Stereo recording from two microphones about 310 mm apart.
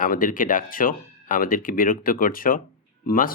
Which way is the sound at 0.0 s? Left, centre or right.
Left.